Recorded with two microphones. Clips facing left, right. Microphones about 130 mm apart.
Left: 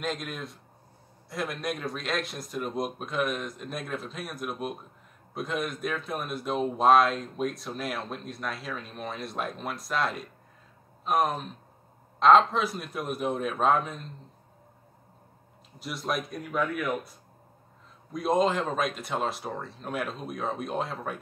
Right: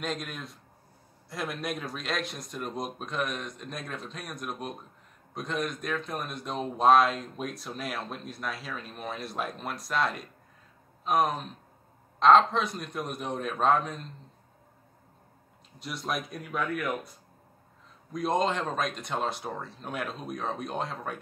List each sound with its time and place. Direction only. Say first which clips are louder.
0.0 s speech: left 2 dB; centre (ahead or behind)
15.8 s speech: left 2 dB; centre (ahead or behind)
18.1 s speech: left 2 dB; centre (ahead or behind)